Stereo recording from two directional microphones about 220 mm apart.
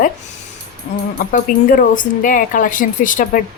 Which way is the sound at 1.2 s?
40° left (ahead or behind).